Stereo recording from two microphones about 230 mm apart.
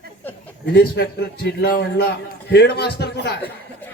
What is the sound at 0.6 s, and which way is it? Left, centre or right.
A man's voice, left.